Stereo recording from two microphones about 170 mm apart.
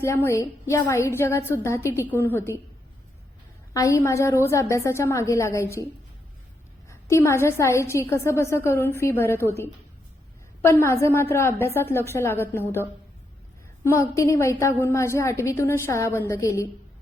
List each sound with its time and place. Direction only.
0.0 s a woman's voice: 15° left (ahead or behind)
3.8 s a woman's voice: 20° left (ahead or behind)
7.1 s a woman's voice: 15° left (ahead or behind)
13.8 s a woman's voice: 15° left (ahead or behind)